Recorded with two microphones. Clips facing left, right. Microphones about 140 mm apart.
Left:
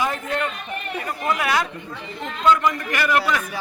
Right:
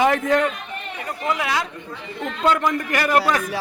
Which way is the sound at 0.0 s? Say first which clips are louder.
Right 7 dB; 90° right.